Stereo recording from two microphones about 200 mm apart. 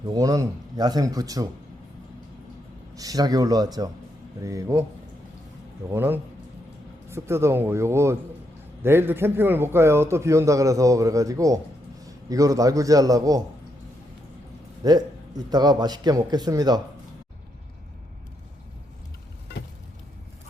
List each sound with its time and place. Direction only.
0.1 s a man's voice: 15° right (ahead or behind)
2.9 s a man's voice: 20° right (ahead or behind)
5.9 s a man's voice: 10° right (ahead or behind)
14.8 s a man's voice: 20° right (ahead or behind)